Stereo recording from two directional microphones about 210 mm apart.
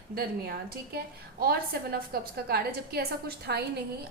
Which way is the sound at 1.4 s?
45° right (ahead or behind).